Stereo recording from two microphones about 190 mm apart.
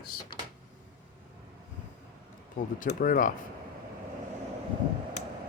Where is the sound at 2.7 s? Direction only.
45° left (ahead or behind).